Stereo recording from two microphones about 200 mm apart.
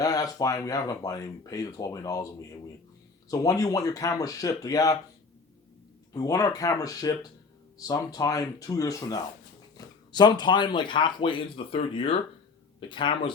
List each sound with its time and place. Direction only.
0.0 s speech: 20° left (ahead or behind)
3.2 s speech: 15° left (ahead or behind)
6.1 s speech: 15° left (ahead or behind)